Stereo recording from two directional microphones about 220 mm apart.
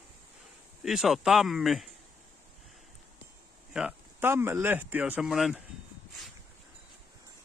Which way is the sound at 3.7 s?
5° right (ahead or behind).